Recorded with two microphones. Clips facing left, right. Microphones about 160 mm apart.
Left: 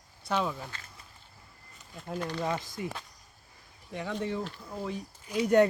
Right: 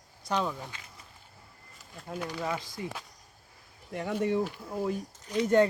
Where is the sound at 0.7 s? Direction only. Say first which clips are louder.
Even; 15° right (ahead or behind).